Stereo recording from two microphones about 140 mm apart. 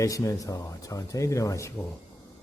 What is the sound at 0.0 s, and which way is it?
Speech, 25° left (ahead or behind).